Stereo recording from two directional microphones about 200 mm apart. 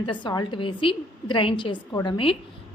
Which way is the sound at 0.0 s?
25° left (ahead or behind).